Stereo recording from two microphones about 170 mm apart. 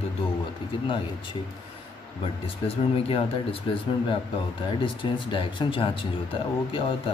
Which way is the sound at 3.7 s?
30° left (ahead or behind).